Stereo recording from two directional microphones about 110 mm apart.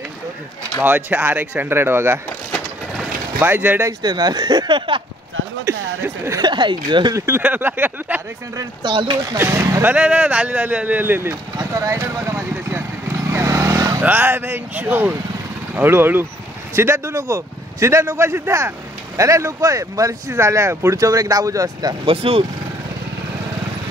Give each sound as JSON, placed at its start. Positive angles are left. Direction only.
{"t": 0.8, "sound": "speech", "side_deg": -15}
{"t": 3.3, "sound": "speech", "side_deg": -20}
{"t": 4.0, "sound": "speech", "side_deg": -40}
{"t": 5.7, "sound": "speech", "side_deg": -25}
{"t": 6.4, "sound": "speech", "side_deg": -45}
{"t": 7.2, "sound": "speech", "side_deg": -20}
{"t": 8.8, "sound": "speech", "side_deg": -45}
{"t": 9.1, "sound": "speech", "side_deg": -35}
{"t": 9.4, "sound": "speech", "side_deg": -25}
{"t": 11.5, "sound": "vehicle", "side_deg": -30}
{"t": 14.0, "sound": "speech", "side_deg": -20}
{"t": 22.0, "sound": "speech", "side_deg": -55}